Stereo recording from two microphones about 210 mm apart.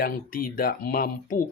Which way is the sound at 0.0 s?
45° left (ahead or behind).